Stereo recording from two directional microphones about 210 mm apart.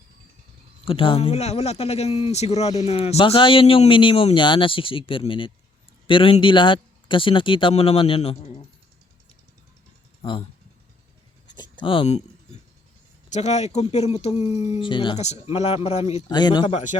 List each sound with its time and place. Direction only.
0.9 s a man's voice: 25° left (ahead or behind)
11.5 s writing: 20° left (ahead or behind)
13.3 s speech: 30° left (ahead or behind)
16.3 s a man's voice: 20° left (ahead or behind)
16.7 s speech: 35° left (ahead or behind)